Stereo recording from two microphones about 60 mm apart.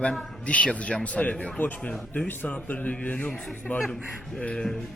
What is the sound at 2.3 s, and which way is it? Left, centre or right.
Speech, left.